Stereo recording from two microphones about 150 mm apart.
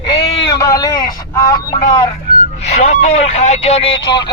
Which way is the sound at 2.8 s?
55° left (ahead or behind).